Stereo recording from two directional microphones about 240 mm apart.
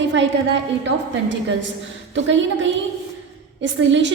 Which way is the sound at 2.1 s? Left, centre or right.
Right.